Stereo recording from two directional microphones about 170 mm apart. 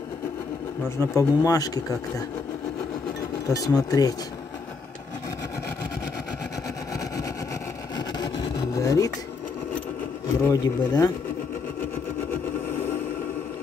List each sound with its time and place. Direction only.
0.8 s speech: 15° left (ahead or behind)
3.5 s speech: 20° left (ahead or behind)
8.4 s vehicle: 20° left (ahead or behind)
10.4 s speech: 15° left (ahead or behind)